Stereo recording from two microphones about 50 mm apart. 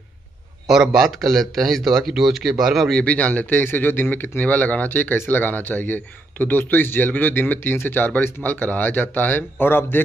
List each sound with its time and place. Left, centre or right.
0.7 s speech: centre
3.1 s speech: left
3.6 s a man's voice: left